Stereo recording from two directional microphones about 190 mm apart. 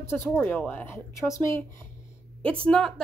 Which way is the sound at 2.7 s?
5° left (ahead or behind).